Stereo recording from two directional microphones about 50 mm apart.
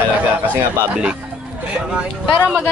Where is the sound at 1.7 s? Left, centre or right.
Right.